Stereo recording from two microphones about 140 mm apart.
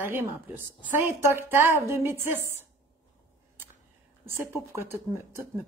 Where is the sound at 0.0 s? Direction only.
15° right (ahead or behind).